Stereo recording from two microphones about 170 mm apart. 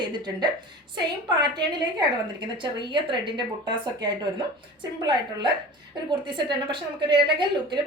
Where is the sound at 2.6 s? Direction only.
25° right (ahead or behind).